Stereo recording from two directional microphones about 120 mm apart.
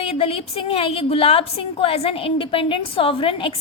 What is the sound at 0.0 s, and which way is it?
A woman's voice, 55° left (ahead or behind).